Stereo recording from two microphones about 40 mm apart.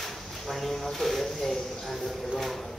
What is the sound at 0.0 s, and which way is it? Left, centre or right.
Speech, centre.